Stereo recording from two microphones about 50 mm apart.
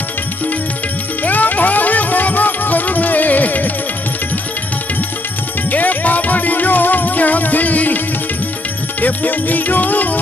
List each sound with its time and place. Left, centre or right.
1.2 s music: left
5.7 s music: left
9.0 s music: left